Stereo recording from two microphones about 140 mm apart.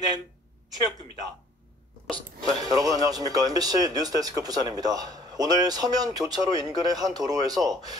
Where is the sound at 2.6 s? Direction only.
25° right (ahead or behind).